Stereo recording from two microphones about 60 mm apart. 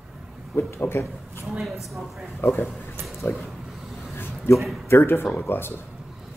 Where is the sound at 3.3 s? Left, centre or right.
Centre.